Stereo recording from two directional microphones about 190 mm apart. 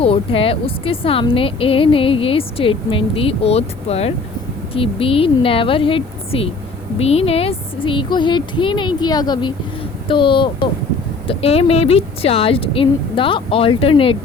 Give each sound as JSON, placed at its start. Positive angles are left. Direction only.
{"t": 0.0, "sound": "a woman's voice", "side_deg": 30}